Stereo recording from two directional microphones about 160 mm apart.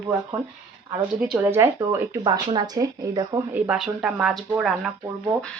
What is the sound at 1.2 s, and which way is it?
Speech, 10° right (ahead or behind).